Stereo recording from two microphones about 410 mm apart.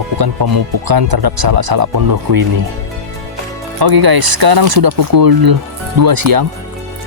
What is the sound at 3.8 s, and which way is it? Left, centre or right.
Speech, right.